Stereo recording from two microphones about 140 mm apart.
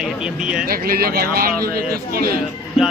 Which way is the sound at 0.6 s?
90° right.